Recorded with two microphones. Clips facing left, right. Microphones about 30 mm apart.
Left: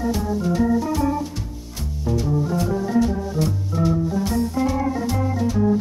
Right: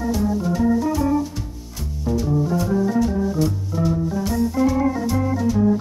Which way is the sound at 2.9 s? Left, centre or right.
Centre.